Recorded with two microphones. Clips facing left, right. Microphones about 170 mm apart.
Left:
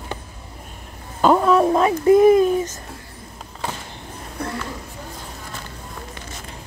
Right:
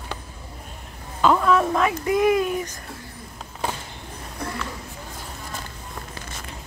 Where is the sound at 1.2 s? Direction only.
35° left (ahead or behind).